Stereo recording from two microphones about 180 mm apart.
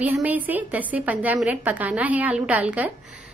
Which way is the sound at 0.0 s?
10° right (ahead or behind).